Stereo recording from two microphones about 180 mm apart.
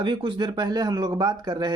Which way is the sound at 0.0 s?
30° right (ahead or behind).